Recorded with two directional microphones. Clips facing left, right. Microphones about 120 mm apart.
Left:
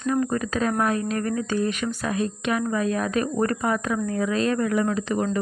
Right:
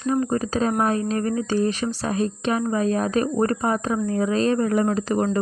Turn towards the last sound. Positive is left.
turn(degrees=-40)  # may be behind; listen again after turning